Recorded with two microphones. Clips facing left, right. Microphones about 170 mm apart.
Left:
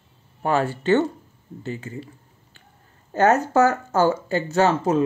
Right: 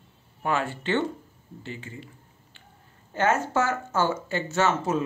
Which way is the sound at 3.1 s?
40° left (ahead or behind).